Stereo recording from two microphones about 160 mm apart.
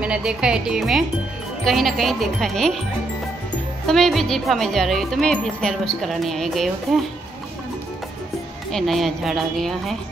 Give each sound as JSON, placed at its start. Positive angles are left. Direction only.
{"t": 0.0, "sound": "a woman's voice", "side_deg": -5}
{"t": 3.8, "sound": "a woman's voice", "side_deg": 0}
{"t": 8.7, "sound": "a woman's voice", "side_deg": 0}